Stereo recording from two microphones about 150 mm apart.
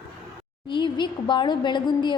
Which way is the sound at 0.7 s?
35° left (ahead or behind).